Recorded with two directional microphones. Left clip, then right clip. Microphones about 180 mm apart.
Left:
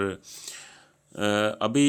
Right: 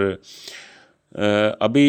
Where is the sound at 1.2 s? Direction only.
30° right (ahead or behind).